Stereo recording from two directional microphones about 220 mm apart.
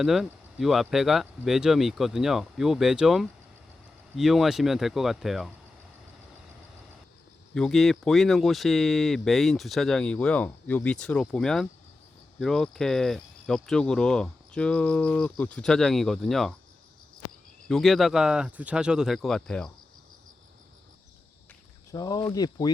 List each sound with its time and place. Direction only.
0.0 s speech: centre (ahead or behind)
7.5 s speech: centre (ahead or behind)
17.7 s speech: centre (ahead or behind)
21.9 s speech: 15° left (ahead or behind)